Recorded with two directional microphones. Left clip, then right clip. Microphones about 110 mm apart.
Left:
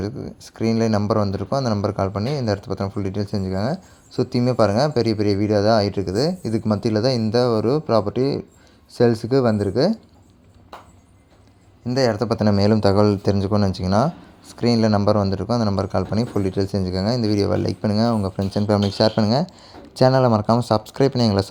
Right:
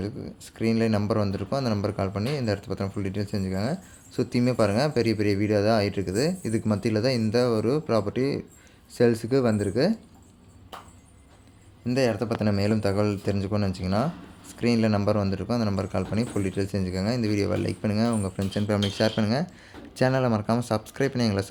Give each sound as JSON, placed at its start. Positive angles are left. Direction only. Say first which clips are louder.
{"t": 0.0, "sound": "speech", "louder": "left 5 dB", "side_deg": 35}
{"t": 12.1, "sound": "a man's voice", "louder": "left 7 dB", "side_deg": 55}
{"t": 13.3, "sound": "speech", "louder": "left 7 dB", "side_deg": 45}